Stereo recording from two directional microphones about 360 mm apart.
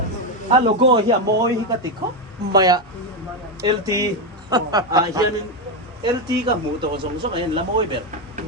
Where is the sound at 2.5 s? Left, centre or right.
Centre.